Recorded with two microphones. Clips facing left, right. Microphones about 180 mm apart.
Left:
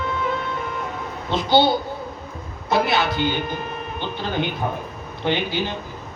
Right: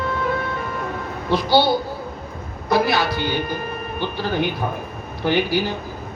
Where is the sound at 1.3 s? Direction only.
20° left (ahead or behind).